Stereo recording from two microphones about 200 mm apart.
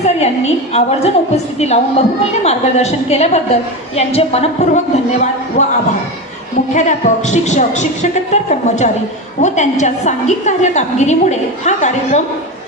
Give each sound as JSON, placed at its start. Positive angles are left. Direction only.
{"t": 0.0, "sound": "a sound", "side_deg": 35}
{"t": 1.5, "sound": "a woman's voice", "side_deg": 35}
{"t": 6.7, "sound": "a woman's voice", "side_deg": 35}